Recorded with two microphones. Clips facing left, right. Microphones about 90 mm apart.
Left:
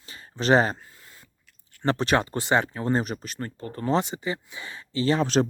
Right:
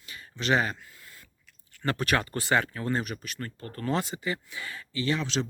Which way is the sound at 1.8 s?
25° left (ahead or behind).